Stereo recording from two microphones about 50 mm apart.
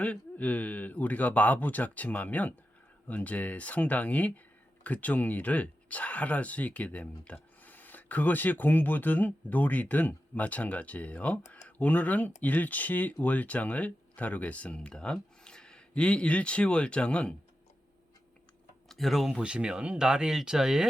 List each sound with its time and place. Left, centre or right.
0.0 s speech: left
18.9 s speech: centre
19.4 s speech: centre